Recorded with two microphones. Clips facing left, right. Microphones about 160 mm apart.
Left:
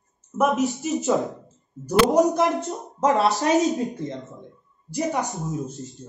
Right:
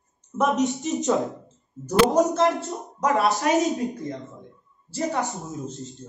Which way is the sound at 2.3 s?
15° left (ahead or behind).